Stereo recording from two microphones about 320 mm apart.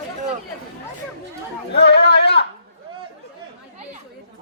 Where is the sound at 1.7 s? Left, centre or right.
Left.